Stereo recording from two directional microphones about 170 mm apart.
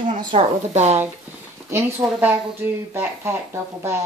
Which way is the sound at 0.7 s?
40° right (ahead or behind).